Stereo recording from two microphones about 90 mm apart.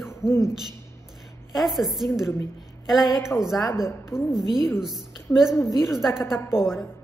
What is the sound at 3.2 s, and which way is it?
A woman's voice, 30° left (ahead or behind).